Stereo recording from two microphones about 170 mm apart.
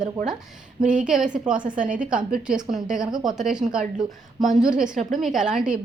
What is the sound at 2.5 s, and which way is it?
A woman's voice, 5° right (ahead or behind).